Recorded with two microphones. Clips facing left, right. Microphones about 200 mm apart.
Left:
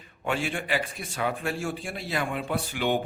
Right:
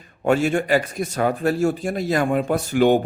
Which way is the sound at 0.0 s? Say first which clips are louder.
Right 10 dB; 45° right (ahead or behind).